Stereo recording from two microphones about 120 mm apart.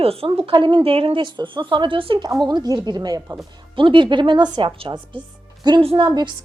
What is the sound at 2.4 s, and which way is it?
Speech, 35° right (ahead or behind).